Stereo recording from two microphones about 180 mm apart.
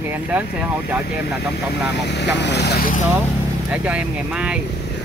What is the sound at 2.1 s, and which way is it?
Speech, 70° left (ahead or behind).